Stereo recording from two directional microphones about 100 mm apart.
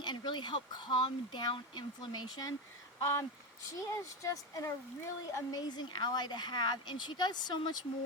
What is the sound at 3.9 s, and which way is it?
Speech, 30° left (ahead or behind).